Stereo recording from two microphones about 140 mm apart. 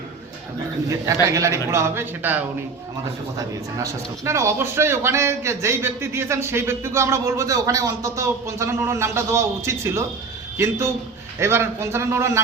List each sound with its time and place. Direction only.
0.9 s a man's voice: 25° right (ahead or behind)